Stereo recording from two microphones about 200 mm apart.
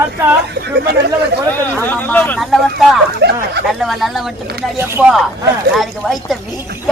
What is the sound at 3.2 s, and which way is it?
Speech, 55° right (ahead or behind).